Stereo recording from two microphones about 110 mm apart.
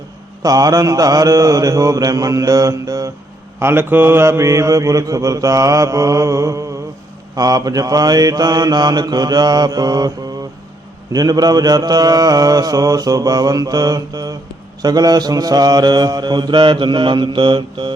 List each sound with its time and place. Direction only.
0.4 s mantra: 35° right (ahead or behind)
3.6 s mantra: 20° right (ahead or behind); by 10.1 s 40° right (ahead or behind)
11.1 s mantra: 35° right (ahead or behind)